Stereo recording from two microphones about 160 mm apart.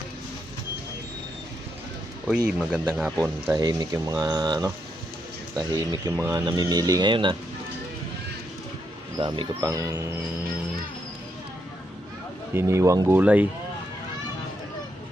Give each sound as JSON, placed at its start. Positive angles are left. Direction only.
{"t": 2.5, "sound": "speech", "side_deg": -5}
{"t": 3.5, "sound": "speech", "side_deg": -20}
{"t": 9.1, "sound": "speech", "side_deg": -30}
{"t": 12.5, "sound": "speech", "side_deg": -20}